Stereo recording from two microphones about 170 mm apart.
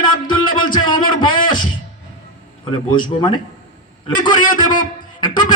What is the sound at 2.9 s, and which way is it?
Speech, 25° left (ahead or behind).